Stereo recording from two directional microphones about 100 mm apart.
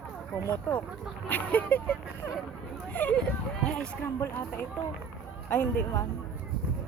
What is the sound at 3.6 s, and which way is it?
Speech, 10° left (ahead or behind).